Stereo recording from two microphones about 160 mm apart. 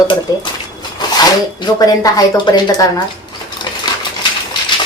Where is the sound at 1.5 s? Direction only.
25° left (ahead or behind).